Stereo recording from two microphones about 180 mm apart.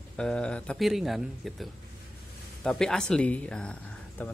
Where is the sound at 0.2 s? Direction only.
5° left (ahead or behind).